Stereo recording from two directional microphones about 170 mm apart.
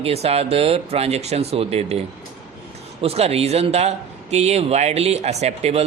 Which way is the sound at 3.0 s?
35° right (ahead or behind).